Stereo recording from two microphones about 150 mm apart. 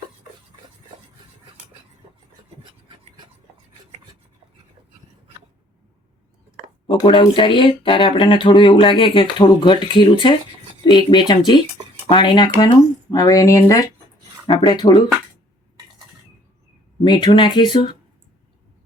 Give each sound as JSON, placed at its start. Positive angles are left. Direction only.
{"t": 6.8, "sound": "speech", "side_deg": 35}
{"t": 14.4, "sound": "speech", "side_deg": 30}
{"t": 17.0, "sound": "speech", "side_deg": 30}